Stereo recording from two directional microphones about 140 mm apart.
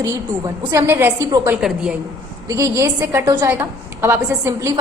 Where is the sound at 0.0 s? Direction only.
25° right (ahead or behind).